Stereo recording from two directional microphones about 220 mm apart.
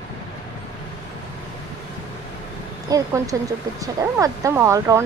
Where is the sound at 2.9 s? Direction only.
15° right (ahead or behind).